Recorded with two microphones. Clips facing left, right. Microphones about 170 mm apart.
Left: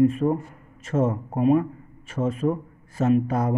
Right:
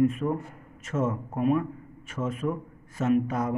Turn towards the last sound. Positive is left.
turn(degrees=35)  # may be behind; listen again after turning